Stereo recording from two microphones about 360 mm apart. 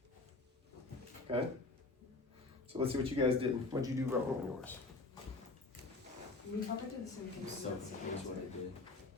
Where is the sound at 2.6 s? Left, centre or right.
Centre.